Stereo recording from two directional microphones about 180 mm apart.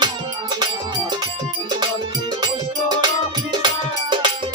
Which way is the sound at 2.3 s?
25° right (ahead or behind).